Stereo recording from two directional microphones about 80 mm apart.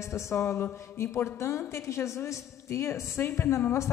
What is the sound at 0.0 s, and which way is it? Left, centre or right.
A woman's voice, left.